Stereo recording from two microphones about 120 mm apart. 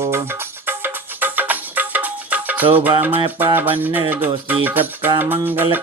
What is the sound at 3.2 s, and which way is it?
Music, 45° right (ahead or behind).